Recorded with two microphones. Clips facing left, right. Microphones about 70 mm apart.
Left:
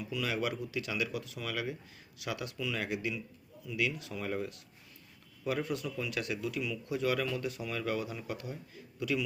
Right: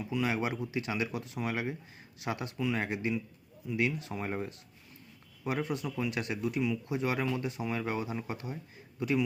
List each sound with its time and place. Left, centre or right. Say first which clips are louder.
0.0 s a man's voice: right 3 dB; right